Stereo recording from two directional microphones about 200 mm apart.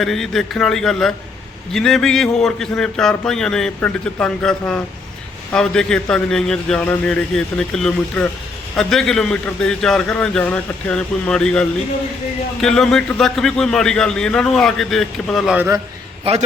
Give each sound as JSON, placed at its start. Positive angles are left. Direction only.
{"t": 0.0, "sound": "a man's voice", "side_deg": 0}
{"t": 12.6, "sound": "a man's voice", "side_deg": 5}
{"t": 16.3, "sound": "a man's voice", "side_deg": -30}